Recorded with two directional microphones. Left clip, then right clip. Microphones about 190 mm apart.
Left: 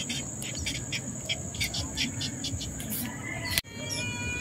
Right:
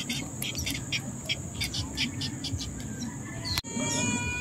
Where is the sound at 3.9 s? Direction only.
15° left (ahead or behind).